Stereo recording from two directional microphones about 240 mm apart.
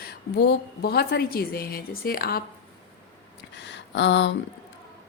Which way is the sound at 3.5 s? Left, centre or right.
Left.